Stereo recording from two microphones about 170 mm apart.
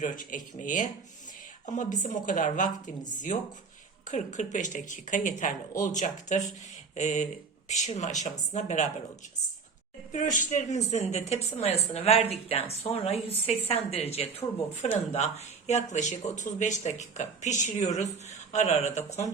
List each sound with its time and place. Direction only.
0.0 s speech: 50° left (ahead or behind)
10.1 s speech: 50° left (ahead or behind)